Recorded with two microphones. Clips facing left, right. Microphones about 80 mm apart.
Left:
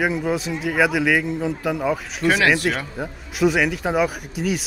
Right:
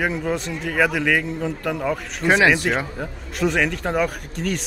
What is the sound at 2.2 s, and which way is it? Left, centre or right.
Speech, centre.